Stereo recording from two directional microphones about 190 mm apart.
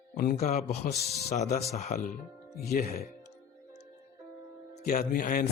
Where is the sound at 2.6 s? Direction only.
55° left (ahead or behind).